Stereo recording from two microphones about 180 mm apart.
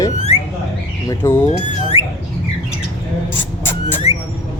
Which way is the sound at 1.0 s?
10° left (ahead or behind).